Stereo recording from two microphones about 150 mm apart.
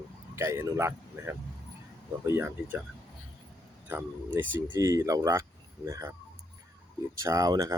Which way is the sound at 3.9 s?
15° right (ahead or behind).